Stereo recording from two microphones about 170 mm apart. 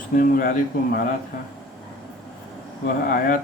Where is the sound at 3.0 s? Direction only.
55° left (ahead or behind).